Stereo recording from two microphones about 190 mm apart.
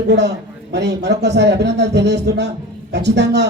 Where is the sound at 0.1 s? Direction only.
65° right (ahead or behind).